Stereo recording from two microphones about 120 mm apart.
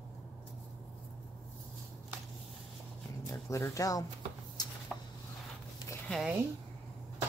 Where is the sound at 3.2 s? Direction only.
25° left (ahead or behind).